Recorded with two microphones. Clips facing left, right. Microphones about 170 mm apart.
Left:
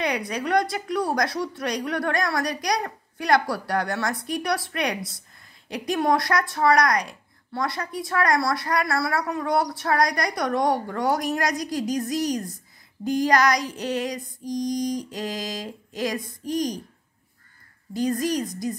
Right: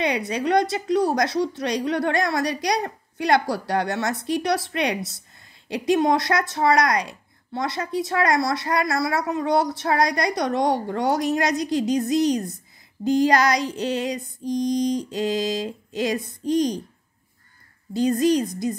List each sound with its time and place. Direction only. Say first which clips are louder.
0.0 s speech: right 3 dB; 25° right (ahead or behind)
17.9 s speech: right 5 dB; 25° right (ahead or behind)